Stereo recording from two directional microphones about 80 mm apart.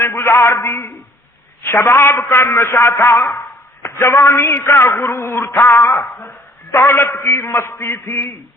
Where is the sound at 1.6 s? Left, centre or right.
Left.